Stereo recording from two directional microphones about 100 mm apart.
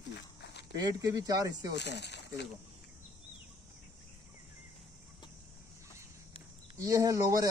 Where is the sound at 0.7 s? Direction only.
40° right (ahead or behind).